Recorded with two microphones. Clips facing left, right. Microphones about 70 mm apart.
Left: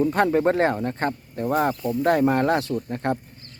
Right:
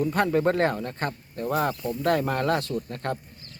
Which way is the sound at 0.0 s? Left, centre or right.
Left.